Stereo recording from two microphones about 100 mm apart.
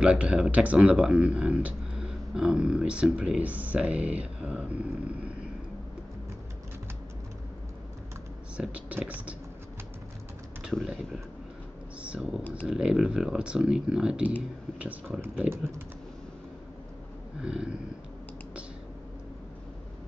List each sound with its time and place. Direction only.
0.0 s speech: 10° right (ahead or behind)
8.5 s speech: 15° right (ahead or behind)
10.7 s speech: centre (ahead or behind); by 15.4 s 20° right (ahead or behind)
17.4 s speech: 10° right (ahead or behind)